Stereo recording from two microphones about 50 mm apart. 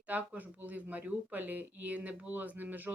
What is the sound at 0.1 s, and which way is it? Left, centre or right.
Speech, right.